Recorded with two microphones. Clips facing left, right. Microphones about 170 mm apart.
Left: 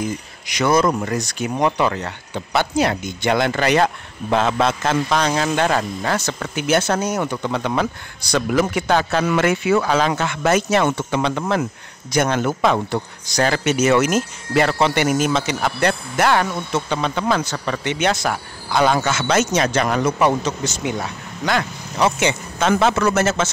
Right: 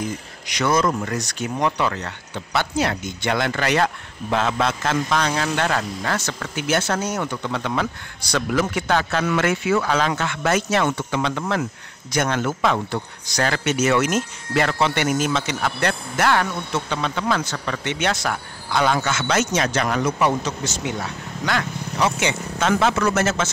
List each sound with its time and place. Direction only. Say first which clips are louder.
0.5 s speech: left 3 dB; 10° left (ahead or behind); by 20.0 s 30° left (ahead or behind)
21.5 s speech: left 3 dB; 20° left (ahead or behind)